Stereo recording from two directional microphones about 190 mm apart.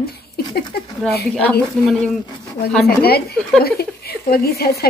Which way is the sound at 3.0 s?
55° left (ahead or behind).